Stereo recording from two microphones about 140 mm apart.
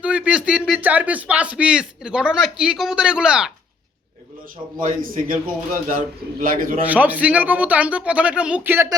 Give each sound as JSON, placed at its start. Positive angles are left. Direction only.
{"t": 0.0, "sound": "a sound", "side_deg": -10}
{"t": 0.8, "sound": "speech", "side_deg": -10}
{"t": 4.8, "sound": "a man's voice", "side_deg": -80}
{"t": 6.8, "sound": "speech", "side_deg": -10}